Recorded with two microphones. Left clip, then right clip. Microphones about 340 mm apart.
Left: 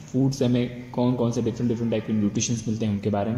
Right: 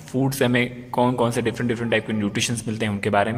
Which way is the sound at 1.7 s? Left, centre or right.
Right.